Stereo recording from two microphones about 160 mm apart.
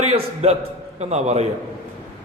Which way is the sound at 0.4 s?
40° right (ahead or behind).